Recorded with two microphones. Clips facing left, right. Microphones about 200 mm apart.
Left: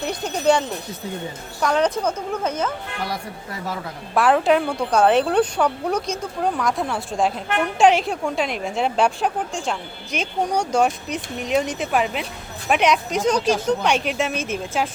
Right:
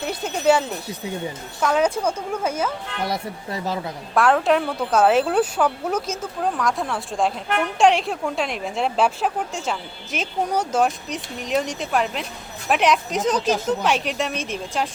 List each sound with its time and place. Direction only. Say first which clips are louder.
0.0 s a woman's voice: even; 5° right (ahead or behind)
3.0 s speech: right 5 dB; 25° right (ahead or behind)
4.1 s speech: left 1 dB; centre (ahead or behind)